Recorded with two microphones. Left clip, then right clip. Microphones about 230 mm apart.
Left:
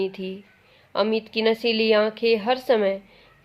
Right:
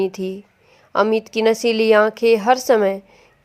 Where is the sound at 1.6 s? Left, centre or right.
Right.